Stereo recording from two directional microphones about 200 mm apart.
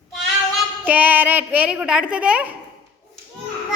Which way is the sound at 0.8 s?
10° right (ahead or behind).